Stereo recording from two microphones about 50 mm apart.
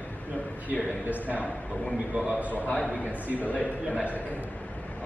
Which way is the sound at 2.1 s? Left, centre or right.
Right.